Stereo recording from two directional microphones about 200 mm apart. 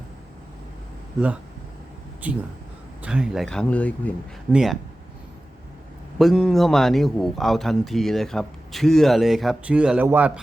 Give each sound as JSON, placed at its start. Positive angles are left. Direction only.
{"t": 2.2, "sound": "a man's voice", "side_deg": -10}
{"t": 6.1, "sound": "a man's voice", "side_deg": 0}